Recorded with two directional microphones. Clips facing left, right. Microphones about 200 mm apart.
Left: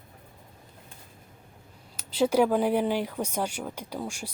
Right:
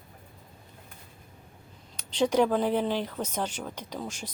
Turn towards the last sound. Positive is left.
turn(degrees=10)  # may be behind; listen again after turning